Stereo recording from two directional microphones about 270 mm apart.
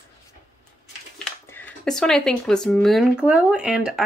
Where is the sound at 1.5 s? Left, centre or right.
Centre.